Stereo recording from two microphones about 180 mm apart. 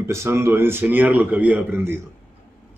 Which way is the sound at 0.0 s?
15° right (ahead or behind).